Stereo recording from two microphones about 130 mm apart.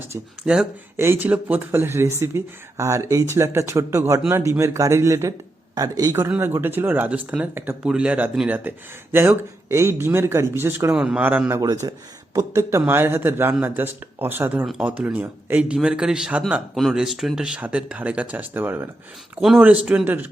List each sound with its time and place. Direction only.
0.4 s speech: 5° right (ahead or behind)
0.9 s speech: 20° right (ahead or behind)
10.9 s speech: 5° right (ahead or behind)
11.6 s speech: 30° right (ahead or behind)
19.4 s speech: centre (ahead or behind)
19.6 s speech: 10° right (ahead or behind)